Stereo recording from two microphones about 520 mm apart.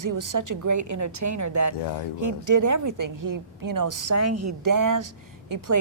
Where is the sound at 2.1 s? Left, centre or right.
Right.